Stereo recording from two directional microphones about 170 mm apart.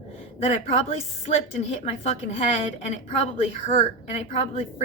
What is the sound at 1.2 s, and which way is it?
A woman's voice, 40° left (ahead or behind).